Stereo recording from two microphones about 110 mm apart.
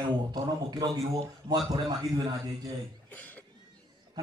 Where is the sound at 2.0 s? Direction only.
35° right (ahead or behind).